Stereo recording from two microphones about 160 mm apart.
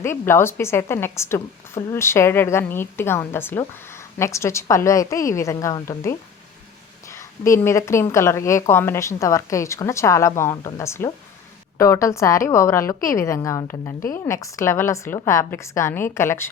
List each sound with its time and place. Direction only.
0.0 s a woman's voice: 15° left (ahead or behind)
7.4 s a woman's voice: 15° left (ahead or behind)